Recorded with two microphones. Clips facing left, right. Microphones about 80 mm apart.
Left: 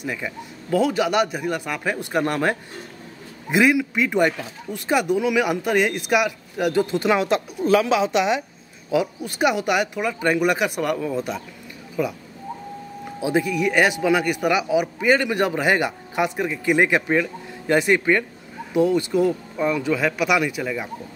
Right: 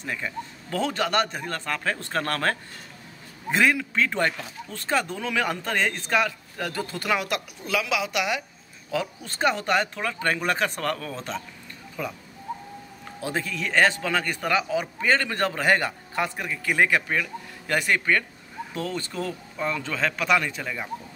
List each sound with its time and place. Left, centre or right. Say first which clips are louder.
0.0 s speech: left 2 dB; centre
8.9 s speech: left 6 dB; centre
13.2 s speech: left 8 dB; centre